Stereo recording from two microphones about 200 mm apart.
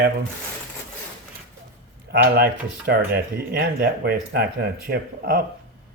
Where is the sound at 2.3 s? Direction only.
50° right (ahead or behind).